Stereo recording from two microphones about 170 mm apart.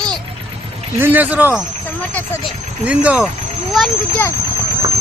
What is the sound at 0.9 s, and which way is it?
Speech, 10° right (ahead or behind).